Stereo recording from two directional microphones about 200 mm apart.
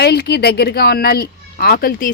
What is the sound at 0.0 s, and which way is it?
A woman's voice, 55° left (ahead or behind).